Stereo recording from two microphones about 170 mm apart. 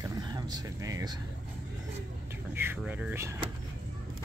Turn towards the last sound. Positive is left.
turn(degrees=-15)  # may be behind; listen again after turning